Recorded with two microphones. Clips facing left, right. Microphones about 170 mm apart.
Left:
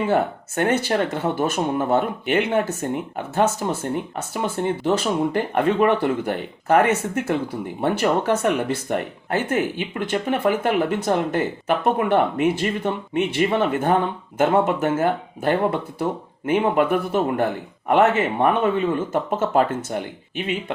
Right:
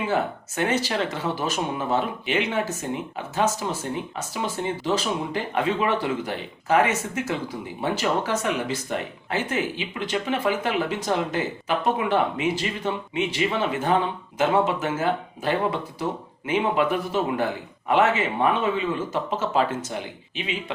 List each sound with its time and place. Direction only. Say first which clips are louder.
0.1 s a man's voice: left 4 dB; 55° left (ahead or behind)